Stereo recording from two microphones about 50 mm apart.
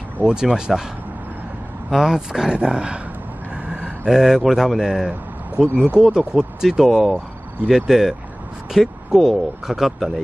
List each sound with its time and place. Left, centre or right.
0.2 s speech: centre
1.9 s speech: centre
3.7 s vehicle: centre
4.1 s speech: centre
6.9 s speech: centre